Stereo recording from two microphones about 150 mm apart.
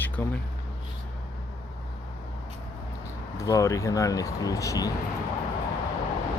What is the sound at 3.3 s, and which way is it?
Speech, 20° left (ahead or behind).